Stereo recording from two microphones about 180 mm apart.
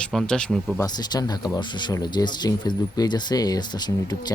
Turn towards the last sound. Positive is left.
turn(degrees=25)  # may be behind; listen again after turning